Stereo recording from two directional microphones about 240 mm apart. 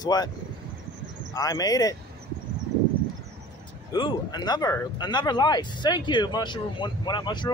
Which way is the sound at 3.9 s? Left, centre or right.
Centre.